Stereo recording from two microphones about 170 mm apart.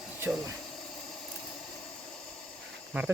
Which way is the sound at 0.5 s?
Centre (ahead or behind).